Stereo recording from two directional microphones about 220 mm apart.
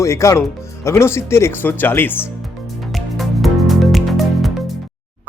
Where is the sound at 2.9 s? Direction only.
Centre (ahead or behind).